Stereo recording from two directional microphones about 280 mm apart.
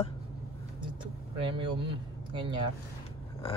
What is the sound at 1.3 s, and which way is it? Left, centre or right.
Speech, centre.